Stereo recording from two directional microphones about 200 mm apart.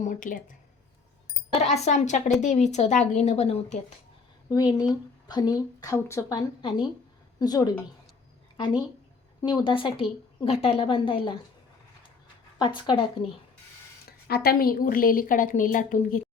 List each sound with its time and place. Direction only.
0.0 s a woman's voice: 40° left (ahead or behind)
1.6 s a woman's voice: 35° left (ahead or behind)
4.4 s a woman's voice: 20° left (ahead or behind)
9.4 s a woman's voice: 20° left (ahead or behind)
12.5 s a woman's voice: 25° left (ahead or behind)
14.3 s a woman's voice: 50° left (ahead or behind)